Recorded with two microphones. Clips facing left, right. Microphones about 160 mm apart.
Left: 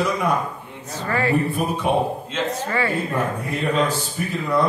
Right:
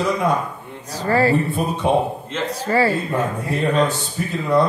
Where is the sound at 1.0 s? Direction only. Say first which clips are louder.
Right 4 dB; 35° right (ahead or behind).